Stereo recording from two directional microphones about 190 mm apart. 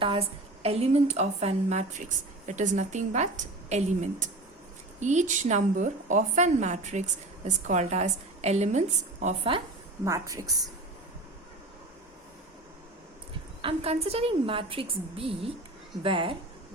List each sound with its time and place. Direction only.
0.0 s a woman's voice: 30° right (ahead or behind)
10.0 s a woman's voice: 15° right (ahead or behind)
13.6 s a woman's voice: 30° right (ahead or behind)